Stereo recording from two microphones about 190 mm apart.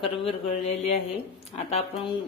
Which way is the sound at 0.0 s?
30° left (ahead or behind).